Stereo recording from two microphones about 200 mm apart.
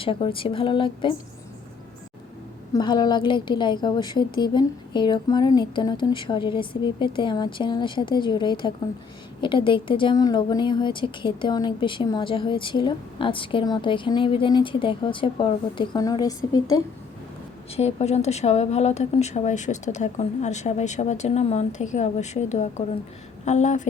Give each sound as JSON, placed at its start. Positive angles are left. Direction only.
{"t": 0.0, "sound": "speech", "side_deg": 25}
{"t": 2.7, "sound": "speech", "side_deg": 20}
{"t": 17.7, "sound": "speech", "side_deg": 35}